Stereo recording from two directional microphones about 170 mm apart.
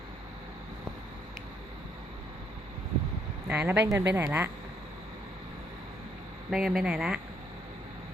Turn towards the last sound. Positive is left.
turn(degrees=-5)  # may be behind; listen again after turning